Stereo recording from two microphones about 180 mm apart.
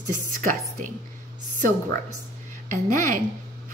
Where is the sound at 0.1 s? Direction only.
45° right (ahead or behind).